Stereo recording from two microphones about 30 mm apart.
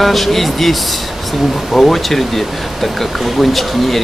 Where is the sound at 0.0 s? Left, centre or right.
Centre.